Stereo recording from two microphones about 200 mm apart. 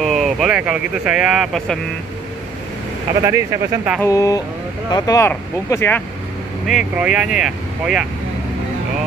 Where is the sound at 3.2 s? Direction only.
15° right (ahead or behind).